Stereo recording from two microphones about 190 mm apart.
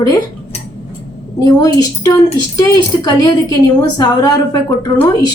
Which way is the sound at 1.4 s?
20° left (ahead or behind).